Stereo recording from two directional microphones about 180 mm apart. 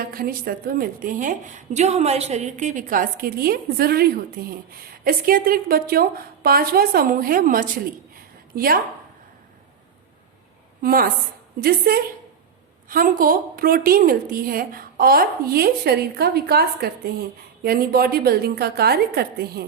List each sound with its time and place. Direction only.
0.1 s a woman's voice: 55° right (ahead or behind)
10.8 s a woman's voice: 55° right (ahead or behind)